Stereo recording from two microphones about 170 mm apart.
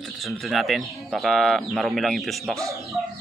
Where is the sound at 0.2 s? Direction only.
Centre (ahead or behind).